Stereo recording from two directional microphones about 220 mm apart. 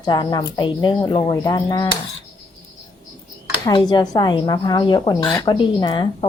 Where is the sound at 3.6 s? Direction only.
20° left (ahead or behind).